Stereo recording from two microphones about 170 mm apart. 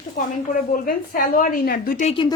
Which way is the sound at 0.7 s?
55° left (ahead or behind).